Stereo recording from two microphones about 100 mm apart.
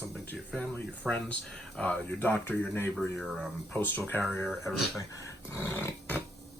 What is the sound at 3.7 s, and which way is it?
Speech, 20° left (ahead or behind).